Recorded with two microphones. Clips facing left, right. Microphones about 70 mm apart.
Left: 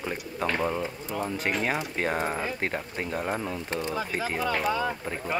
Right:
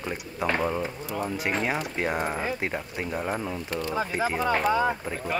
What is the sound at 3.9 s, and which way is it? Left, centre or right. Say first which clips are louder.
Speech: right 5 dB; right.